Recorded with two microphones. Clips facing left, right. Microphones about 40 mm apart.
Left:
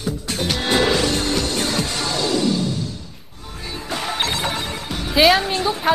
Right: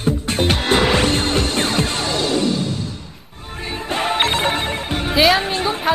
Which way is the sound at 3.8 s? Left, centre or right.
Right.